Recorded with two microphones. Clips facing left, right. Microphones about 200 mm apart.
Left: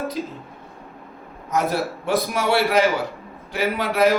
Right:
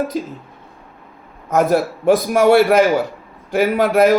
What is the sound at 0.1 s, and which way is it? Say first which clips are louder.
Speech: right 5 dB; 45° right (ahead or behind).